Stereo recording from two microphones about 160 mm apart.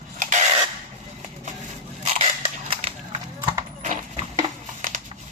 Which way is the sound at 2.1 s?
40° right (ahead or behind).